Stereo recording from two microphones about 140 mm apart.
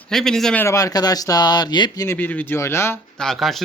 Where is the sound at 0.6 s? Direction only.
20° left (ahead or behind).